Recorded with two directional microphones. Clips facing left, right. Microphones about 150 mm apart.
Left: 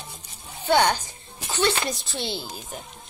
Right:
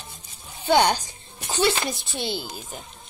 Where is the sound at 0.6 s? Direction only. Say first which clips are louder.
Right 1 dB; 15° right (ahead or behind).